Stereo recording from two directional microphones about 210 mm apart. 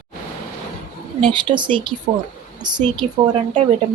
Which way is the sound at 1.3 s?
20° right (ahead or behind).